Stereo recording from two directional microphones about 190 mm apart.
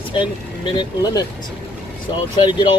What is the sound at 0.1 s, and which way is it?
Speech, 25° left (ahead or behind).